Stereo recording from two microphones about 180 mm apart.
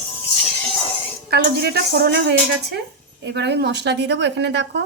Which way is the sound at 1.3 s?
60° right (ahead or behind).